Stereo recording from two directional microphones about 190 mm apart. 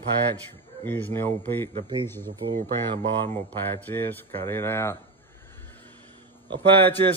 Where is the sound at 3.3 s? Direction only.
10° left (ahead or behind).